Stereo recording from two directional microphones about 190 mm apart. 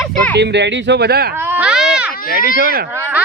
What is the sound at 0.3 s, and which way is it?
Speech, 65° right (ahead or behind).